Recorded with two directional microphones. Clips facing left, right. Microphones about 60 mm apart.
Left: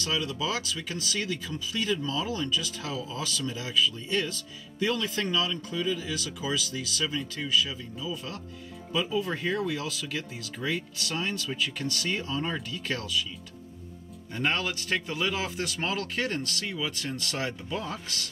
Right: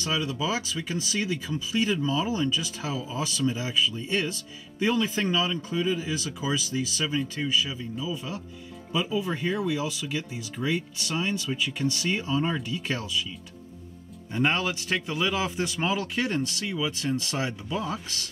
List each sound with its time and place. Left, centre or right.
0.0 s speech: centre
14.3 s speech: centre